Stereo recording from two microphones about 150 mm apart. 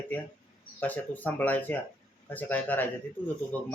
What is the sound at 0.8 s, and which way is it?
Speech, 10° left (ahead or behind).